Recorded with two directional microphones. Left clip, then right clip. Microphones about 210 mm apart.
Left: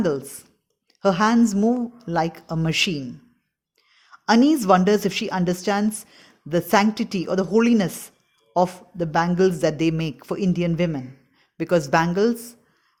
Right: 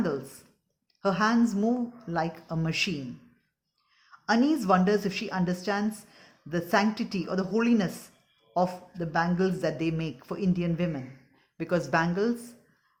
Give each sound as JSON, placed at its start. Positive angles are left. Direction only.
{"t": 0.0, "sound": "a woman's voice", "side_deg": 30}